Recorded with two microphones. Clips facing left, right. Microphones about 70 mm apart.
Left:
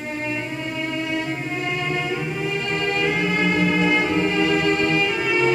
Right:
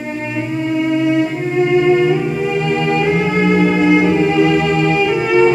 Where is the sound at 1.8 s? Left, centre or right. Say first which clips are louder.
Right 12 dB; right.